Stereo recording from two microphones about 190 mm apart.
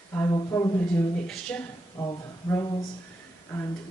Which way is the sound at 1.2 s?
Centre (ahead or behind).